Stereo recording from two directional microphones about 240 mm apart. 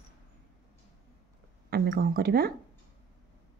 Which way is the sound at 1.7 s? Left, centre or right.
Right.